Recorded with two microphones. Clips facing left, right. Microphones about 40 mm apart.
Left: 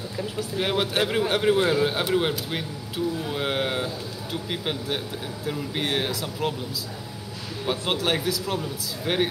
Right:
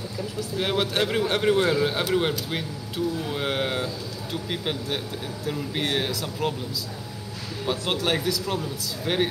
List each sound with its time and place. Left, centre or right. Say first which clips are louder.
0.6 s a man's voice: even; centre
7.6 s speech: even; centre
7.9 s a man's voice: even; centre